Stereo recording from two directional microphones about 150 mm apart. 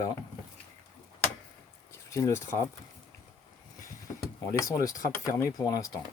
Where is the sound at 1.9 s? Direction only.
20° left (ahead or behind).